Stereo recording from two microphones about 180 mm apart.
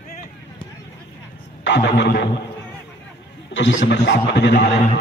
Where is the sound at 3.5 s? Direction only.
90° left.